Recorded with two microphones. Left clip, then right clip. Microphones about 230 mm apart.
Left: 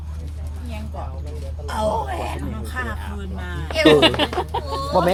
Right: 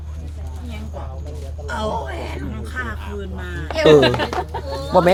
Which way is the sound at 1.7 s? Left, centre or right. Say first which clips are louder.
Left 2 dB; left.